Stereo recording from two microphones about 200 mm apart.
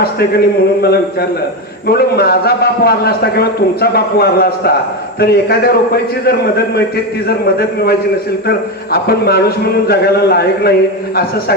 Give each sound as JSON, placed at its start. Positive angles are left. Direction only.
{"t": 0.0, "sound": "a man's voice", "side_deg": 50}
{"t": 8.4, "sound": "a man's voice", "side_deg": 50}